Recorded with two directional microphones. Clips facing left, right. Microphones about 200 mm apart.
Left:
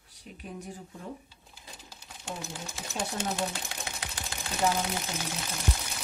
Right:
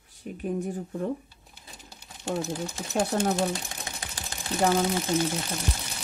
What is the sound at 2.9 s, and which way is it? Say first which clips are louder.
Speech: right 8 dB; 65° right (ahead or behind).